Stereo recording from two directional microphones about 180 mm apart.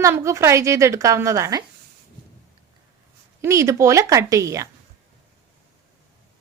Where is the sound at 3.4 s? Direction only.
15° right (ahead or behind).